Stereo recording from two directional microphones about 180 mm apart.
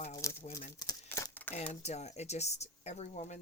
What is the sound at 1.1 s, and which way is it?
Crumpling, 15° left (ahead or behind).